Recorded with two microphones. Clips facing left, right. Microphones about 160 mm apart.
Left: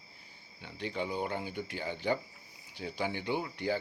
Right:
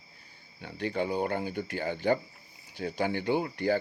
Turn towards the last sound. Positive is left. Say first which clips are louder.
# right 6 dB
turn(degrees=-50)  # may be behind; listen again after turning